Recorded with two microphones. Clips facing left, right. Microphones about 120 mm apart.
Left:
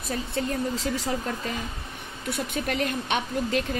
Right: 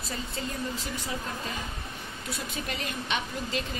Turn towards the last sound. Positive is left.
turn(degrees=55)  # may be behind; listen again after turning